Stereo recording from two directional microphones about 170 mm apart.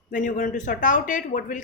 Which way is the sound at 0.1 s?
50° left (ahead or behind).